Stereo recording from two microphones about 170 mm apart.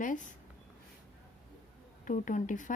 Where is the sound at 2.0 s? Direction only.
50° left (ahead or behind).